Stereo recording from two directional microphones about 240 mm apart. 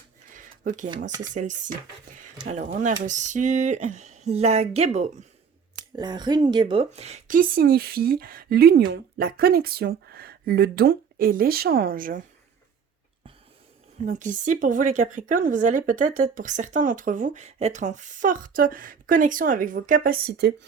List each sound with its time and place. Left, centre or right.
0.3 s a sound: right
0.9 s a woman's voice: right
14.0 s a woman's voice: right